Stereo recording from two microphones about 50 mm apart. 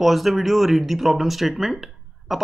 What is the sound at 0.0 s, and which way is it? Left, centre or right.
A man's voice, centre.